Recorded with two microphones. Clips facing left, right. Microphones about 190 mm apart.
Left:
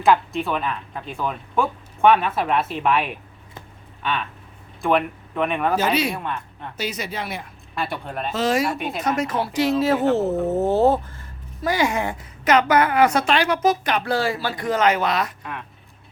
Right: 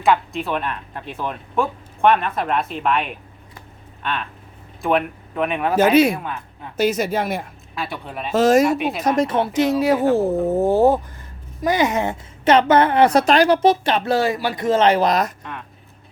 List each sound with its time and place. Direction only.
0.0 s speech: centre (ahead or behind)
5.7 s speech: 50° right (ahead or behind)
6.1 s speech: 5° right (ahead or behind)
6.7 s speech: 50° right (ahead or behind)
7.8 s speech: centre (ahead or behind)
8.3 s speech: 45° right (ahead or behind)
8.8 s speech: centre (ahead or behind)
9.1 s a woman's voice: 30° right (ahead or behind)